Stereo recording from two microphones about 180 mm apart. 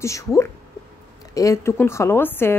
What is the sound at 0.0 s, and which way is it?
A woman's voice, 15° left (ahead or behind).